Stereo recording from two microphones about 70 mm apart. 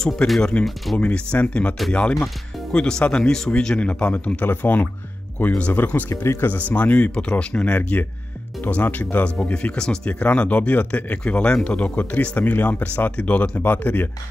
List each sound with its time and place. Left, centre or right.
0.4 s a man's voice: centre
6.0 s speech: left
6.5 s speech: left
9.4 s speech: centre